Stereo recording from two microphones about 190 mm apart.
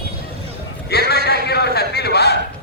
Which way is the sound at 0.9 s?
55° left (ahead or behind).